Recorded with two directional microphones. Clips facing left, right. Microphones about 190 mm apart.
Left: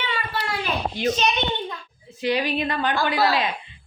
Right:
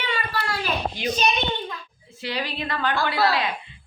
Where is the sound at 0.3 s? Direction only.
25° left (ahead or behind).